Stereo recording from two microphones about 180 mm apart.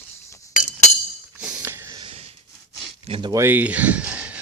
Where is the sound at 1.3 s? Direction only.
5° right (ahead or behind).